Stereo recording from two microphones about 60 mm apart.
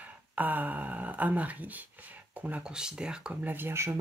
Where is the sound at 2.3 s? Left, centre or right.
Right.